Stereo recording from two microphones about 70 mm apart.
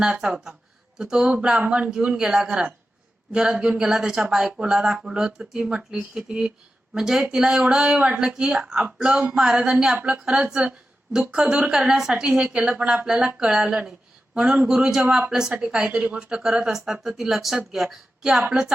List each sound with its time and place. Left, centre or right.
0.0 s speech: centre